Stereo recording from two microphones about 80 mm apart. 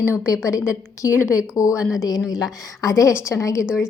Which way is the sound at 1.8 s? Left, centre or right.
Centre.